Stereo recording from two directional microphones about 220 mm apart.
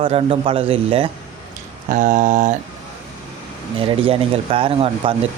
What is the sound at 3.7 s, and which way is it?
Speech, 25° right (ahead or behind).